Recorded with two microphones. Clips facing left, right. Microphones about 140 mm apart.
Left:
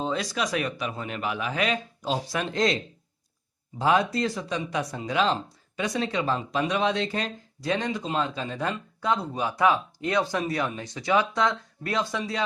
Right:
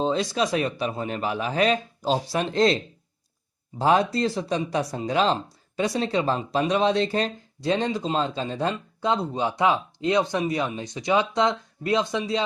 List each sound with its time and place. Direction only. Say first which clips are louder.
0.0 s speech: right 5 dB; 25° right (ahead or behind)
3.8 s speech: right 2 dB; 35° right (ahead or behind)